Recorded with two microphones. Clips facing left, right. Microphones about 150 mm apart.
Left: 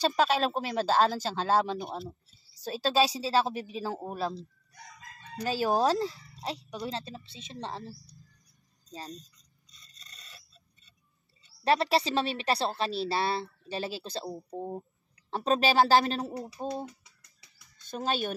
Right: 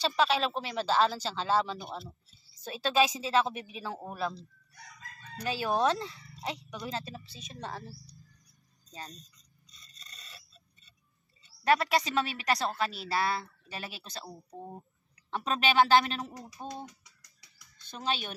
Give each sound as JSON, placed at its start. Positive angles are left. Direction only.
{"t": 0.0, "sound": "speech", "side_deg": 45}
{"t": 5.4, "sound": "speech", "side_deg": 40}
{"t": 11.6, "sound": "a woman's voice", "side_deg": 30}
{"t": 15.3, "sound": "speech", "side_deg": 35}
{"t": 17.8, "sound": "a woman's voice", "side_deg": 45}